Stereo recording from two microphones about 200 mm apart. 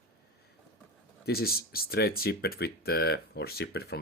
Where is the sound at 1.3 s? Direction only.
50° left (ahead or behind).